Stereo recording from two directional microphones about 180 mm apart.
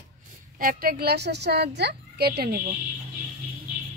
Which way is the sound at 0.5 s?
50° right (ahead or behind).